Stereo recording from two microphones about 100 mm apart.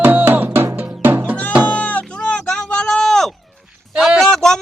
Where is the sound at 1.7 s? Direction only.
10° left (ahead or behind).